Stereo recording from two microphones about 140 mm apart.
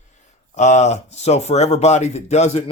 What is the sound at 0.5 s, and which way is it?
Speech, 55° left (ahead or behind).